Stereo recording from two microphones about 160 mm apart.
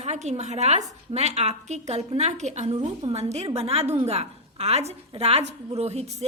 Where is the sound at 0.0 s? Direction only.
45° right (ahead or behind).